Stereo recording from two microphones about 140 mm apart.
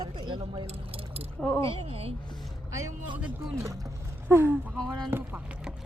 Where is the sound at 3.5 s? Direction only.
25° right (ahead or behind).